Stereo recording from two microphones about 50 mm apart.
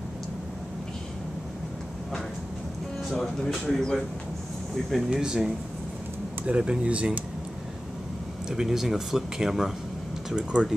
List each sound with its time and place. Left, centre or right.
3.6 s speech: centre
5.1 s speech: centre
6.4 s speech: right
8.5 s speech: centre